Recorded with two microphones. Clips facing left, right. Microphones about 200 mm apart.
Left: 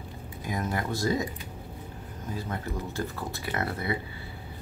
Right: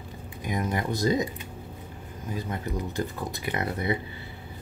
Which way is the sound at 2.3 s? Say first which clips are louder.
Right 2 dB; 15° right (ahead or behind).